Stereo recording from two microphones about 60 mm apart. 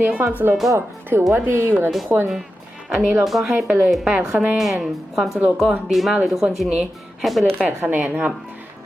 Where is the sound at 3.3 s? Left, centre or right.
Centre.